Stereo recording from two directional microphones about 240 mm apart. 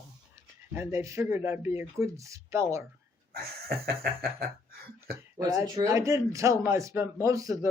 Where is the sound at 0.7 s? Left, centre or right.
Centre.